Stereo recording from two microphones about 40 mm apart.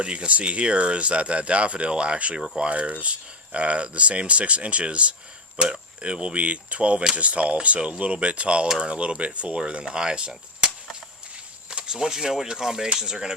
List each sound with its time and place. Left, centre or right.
0.0 s speech: right
11.7 s speech: right